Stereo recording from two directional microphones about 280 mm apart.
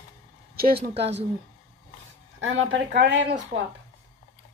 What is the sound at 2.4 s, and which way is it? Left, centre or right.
Speech, right.